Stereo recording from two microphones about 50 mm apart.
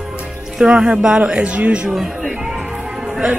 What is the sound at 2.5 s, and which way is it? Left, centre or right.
Music, centre.